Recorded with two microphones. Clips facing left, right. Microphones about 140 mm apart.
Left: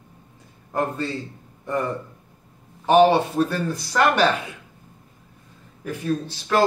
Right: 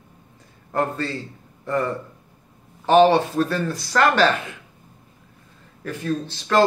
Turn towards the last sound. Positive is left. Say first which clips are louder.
# right 2 dB
turn(degrees=10)  # may be behind; listen again after turning